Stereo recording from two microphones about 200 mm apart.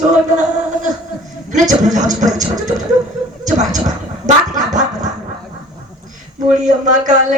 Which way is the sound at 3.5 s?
35° right (ahead or behind).